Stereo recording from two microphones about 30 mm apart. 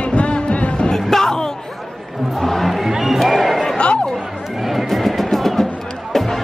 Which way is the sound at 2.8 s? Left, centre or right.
Centre.